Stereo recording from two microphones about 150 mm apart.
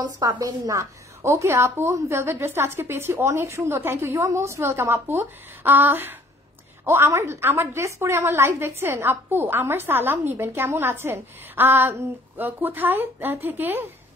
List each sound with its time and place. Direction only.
0.0 s a woman's voice: 25° right (ahead or behind)